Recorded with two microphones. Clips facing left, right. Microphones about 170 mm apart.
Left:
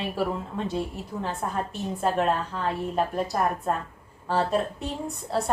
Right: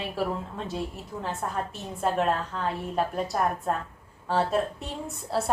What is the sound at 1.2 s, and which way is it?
A woman's voice, centre (ahead or behind).